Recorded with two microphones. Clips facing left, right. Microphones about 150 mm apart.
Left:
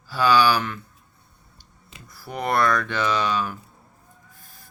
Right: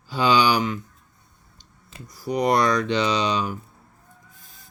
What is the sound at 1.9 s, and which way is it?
Speech, 15° right (ahead or behind).